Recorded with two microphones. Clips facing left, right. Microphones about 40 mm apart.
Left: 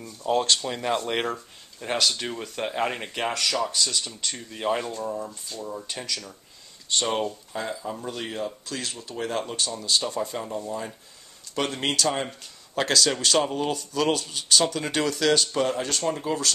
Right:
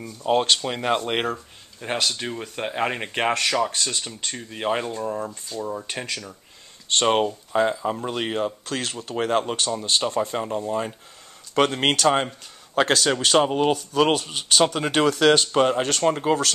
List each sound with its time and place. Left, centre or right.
0.0 s speech: right
3.1 s speech: right
5.1 s speech: right
5.6 s speech: right
6.9 s speech: right
12.7 s speech: right